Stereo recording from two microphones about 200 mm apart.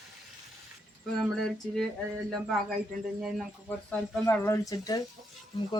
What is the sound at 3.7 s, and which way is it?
Speech, 10° left (ahead or behind).